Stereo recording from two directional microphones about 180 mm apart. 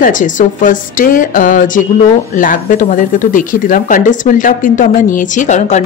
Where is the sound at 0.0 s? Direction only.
45° left (ahead or behind).